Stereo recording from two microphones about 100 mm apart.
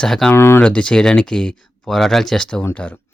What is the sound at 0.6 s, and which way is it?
Speech, 10° left (ahead or behind).